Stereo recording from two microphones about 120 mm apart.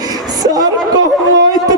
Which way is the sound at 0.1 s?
30° right (ahead or behind).